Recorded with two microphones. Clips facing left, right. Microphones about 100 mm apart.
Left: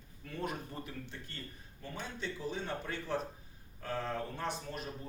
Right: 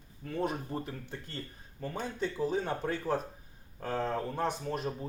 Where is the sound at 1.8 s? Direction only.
45° right (ahead or behind).